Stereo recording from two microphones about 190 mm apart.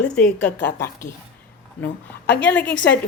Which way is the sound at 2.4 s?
10° left (ahead or behind).